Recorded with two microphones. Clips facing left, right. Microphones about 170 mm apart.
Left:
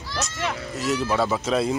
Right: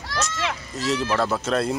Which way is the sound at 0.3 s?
90° right.